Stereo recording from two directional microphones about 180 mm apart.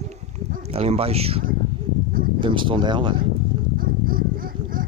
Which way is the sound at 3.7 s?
55° right (ahead or behind).